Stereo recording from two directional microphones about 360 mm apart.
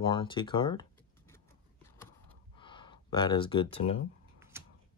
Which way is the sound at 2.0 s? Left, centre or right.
Centre.